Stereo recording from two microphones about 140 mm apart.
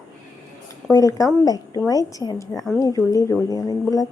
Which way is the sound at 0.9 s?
25° left (ahead or behind).